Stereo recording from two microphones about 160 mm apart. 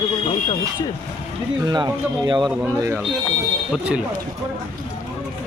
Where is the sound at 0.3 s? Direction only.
30° left (ahead or behind).